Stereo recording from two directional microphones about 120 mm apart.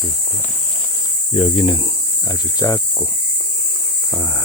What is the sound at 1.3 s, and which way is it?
Speech, 45° left (ahead or behind).